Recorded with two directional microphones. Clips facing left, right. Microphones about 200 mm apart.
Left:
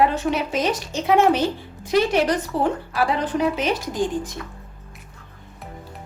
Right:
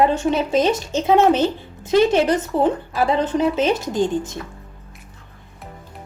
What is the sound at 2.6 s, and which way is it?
Speech, 25° right (ahead or behind).